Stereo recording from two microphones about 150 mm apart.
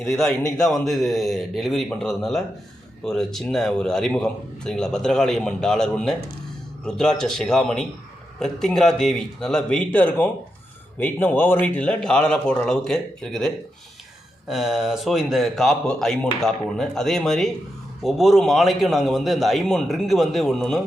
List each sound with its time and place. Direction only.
0.0 s a man's voice: centre (ahead or behind)